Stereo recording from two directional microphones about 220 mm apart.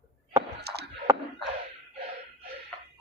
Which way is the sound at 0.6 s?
50° right (ahead or behind).